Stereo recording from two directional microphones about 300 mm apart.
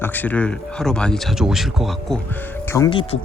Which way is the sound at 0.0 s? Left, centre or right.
Centre.